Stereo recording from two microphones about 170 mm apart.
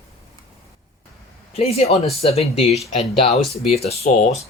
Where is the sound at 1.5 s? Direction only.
35° left (ahead or behind).